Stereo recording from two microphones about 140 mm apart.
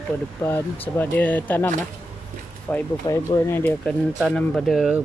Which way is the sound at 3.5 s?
15° left (ahead or behind).